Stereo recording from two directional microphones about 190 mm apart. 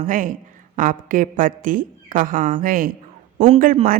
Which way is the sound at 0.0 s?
45° right (ahead or behind).